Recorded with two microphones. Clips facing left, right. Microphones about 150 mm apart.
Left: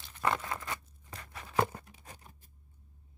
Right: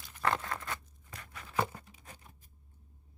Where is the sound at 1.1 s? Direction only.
35° left (ahead or behind).